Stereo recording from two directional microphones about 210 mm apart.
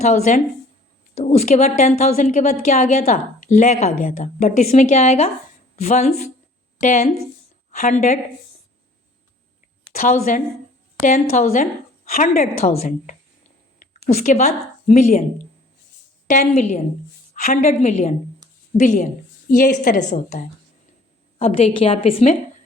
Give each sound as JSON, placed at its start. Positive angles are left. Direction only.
{"t": 0.0, "sound": "a woman's voice", "side_deg": 35}
{"t": 9.9, "sound": "a woman's voice", "side_deg": 35}
{"t": 14.3, "sound": "a woman's voice", "side_deg": 35}
{"t": 16.2, "sound": "a woman's voice", "side_deg": 35}